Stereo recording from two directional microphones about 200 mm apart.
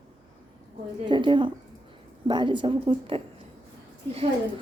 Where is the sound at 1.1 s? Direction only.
25° right (ahead or behind).